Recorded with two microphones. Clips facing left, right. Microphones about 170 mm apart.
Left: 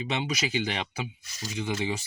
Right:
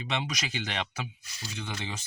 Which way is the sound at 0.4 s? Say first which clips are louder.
Left 5 dB; 10° left (ahead or behind).